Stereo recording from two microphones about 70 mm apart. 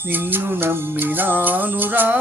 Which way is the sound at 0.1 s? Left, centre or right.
Right.